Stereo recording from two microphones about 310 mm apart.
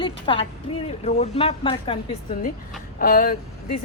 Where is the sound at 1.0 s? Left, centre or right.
Left.